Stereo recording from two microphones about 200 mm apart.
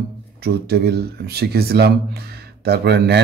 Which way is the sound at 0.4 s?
55° right (ahead or behind).